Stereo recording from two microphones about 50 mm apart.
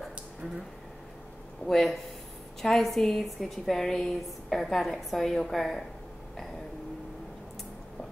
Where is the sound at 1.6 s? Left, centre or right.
Centre.